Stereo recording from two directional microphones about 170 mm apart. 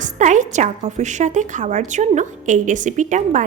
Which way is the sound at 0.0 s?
45° right (ahead or behind).